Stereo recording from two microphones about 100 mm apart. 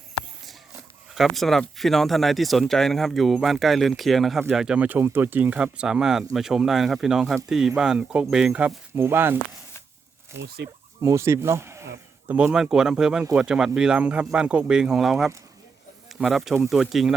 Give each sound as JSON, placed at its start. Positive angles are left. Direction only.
{"t": 1.1, "sound": "speech", "side_deg": 0}
{"t": 12.5, "sound": "speech", "side_deg": -5}